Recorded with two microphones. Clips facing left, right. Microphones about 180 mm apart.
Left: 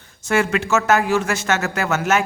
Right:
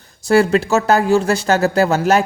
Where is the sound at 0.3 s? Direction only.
35° right (ahead or behind).